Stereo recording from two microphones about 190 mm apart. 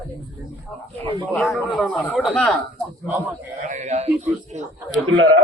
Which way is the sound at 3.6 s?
40° right (ahead or behind).